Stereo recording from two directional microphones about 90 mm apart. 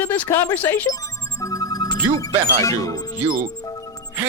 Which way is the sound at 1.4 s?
40° left (ahead or behind).